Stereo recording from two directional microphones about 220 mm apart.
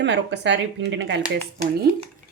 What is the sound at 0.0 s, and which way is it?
Speech, 55° right (ahead or behind).